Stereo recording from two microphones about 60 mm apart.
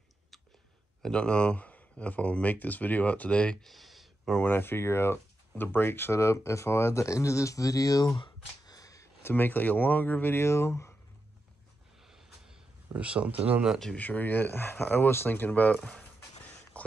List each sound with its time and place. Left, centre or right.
1.0 s speech: centre
3.6 s a sound: centre
4.5 s speech: left
6.1 s speech: left
8.6 s a sound: left
9.2 s speech: left
10.2 s speech: left
12.0 s a sound: centre
12.9 s speech: right
13.9 s speech: left
15.8 s speech: centre
16.8 s a sound: left